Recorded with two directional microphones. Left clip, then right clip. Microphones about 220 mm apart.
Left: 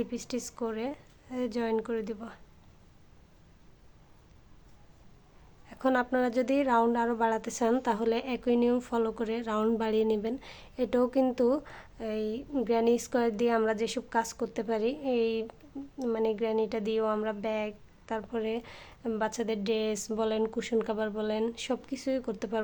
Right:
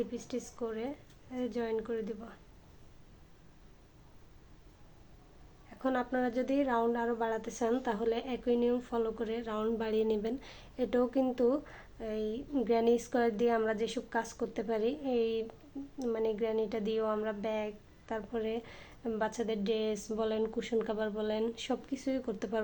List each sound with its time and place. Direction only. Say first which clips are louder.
0.0 s speech: left 3 dB; 30° left (ahead or behind)
5.6 s a woman's voice: left 6 dB; 30° left (ahead or behind)